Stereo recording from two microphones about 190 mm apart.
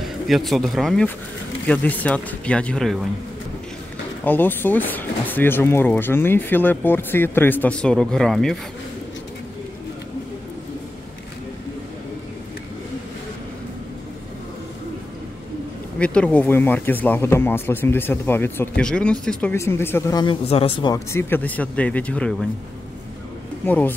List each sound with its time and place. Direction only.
0.3 s speech: centre (ahead or behind)
4.2 s speech: 10° left (ahead or behind)
16.0 s speech: 5° left (ahead or behind)
20.4 s speech: 30° left (ahead or behind)
20.9 s speech: 15° left (ahead or behind)
23.6 s a man's voice: 10° left (ahead or behind)